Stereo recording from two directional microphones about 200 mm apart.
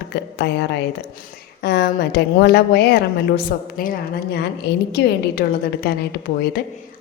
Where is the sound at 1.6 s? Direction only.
55° left (ahead or behind).